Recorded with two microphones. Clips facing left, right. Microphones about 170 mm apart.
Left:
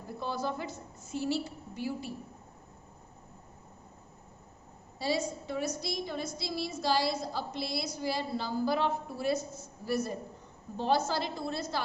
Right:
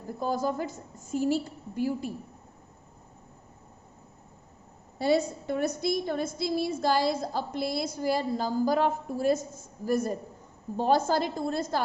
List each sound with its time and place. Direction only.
0.2 s a woman's voice: 45° right (ahead or behind)
4.9 s a woman's voice: 55° right (ahead or behind)